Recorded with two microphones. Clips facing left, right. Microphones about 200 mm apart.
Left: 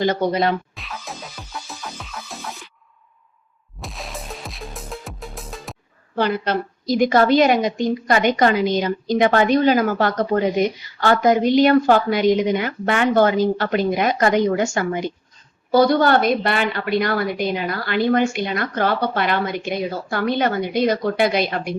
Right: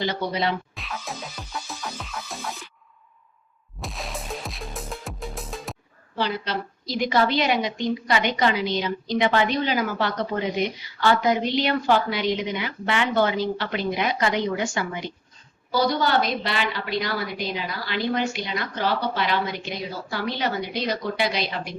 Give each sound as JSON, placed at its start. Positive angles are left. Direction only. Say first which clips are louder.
{"t": 0.0, "sound": "a woman's voice", "louder": "left 7 dB", "side_deg": 45}
{"t": 0.7, "sound": "music", "louder": "even", "side_deg": 0}
{"t": 3.8, "sound": "music", "louder": "even", "side_deg": 0}
{"t": 6.1, "sound": "a woman's voice", "louder": "left 6 dB", "side_deg": 55}